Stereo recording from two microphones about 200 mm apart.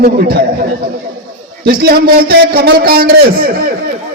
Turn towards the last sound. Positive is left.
turn(degrees=-50)  # may be behind; listen again after turning